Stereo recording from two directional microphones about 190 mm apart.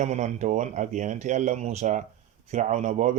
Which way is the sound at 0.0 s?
40° right (ahead or behind).